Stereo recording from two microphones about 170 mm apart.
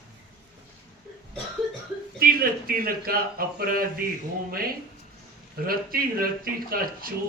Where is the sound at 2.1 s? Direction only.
60° right (ahead or behind).